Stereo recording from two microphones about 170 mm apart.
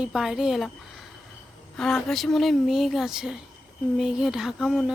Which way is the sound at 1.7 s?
Centre (ahead or behind).